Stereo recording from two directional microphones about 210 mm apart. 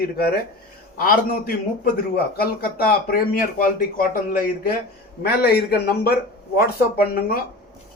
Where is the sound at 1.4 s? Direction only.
45° left (ahead or behind).